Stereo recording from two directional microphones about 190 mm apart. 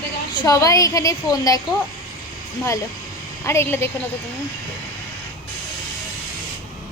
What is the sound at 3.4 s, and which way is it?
Speech, 15° left (ahead or behind).